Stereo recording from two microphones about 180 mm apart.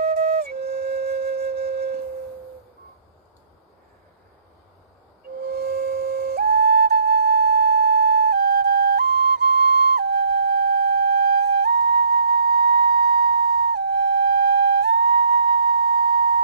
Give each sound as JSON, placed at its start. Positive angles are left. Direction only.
{"t": 0.0, "sound": "flute", "side_deg": -60}
{"t": 5.5, "sound": "flute", "side_deg": -65}